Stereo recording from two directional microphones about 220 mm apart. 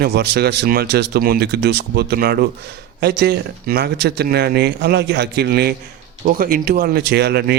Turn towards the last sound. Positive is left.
turn(degrees=-45)  # may be behind; listen again after turning